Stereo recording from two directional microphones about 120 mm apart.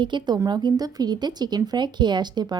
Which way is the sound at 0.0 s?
40° right (ahead or behind).